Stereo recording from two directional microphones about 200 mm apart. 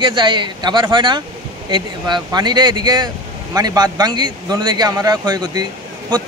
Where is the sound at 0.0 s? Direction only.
25° right (ahead or behind).